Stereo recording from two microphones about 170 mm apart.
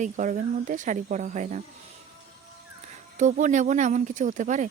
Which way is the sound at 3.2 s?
45° right (ahead or behind).